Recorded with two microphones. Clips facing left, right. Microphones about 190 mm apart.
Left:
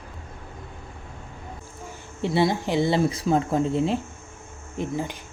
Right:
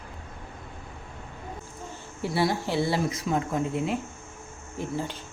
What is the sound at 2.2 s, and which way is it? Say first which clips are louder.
Speech: left 4 dB; 20° left (ahead or behind).